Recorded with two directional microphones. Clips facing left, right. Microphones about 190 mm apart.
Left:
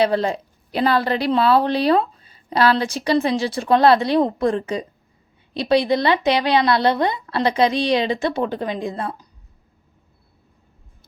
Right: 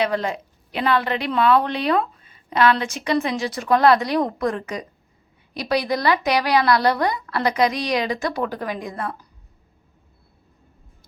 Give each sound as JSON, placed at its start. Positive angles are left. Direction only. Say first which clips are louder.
{"t": 0.0, "sound": "a woman's voice", "louder": "left 4 dB", "side_deg": 30}